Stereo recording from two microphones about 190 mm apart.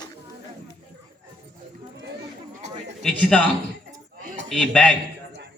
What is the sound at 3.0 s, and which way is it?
Speech, 5° left (ahead or behind).